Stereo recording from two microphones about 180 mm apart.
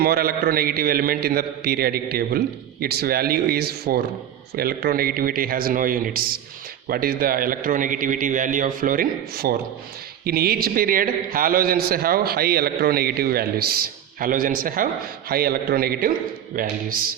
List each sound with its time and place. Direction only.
0.0 s a man's voice: 55° right (ahead or behind)